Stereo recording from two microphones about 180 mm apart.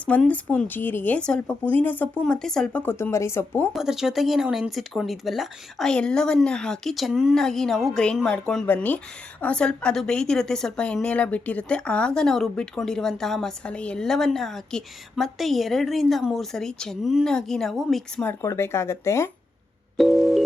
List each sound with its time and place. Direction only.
0.0 s speech: 5° left (ahead or behind)
3.8 s a woman's voice: centre (ahead or behind); by 19.3 s 15° left (ahead or behind)
20.0 s a woman's voice: centre (ahead or behind)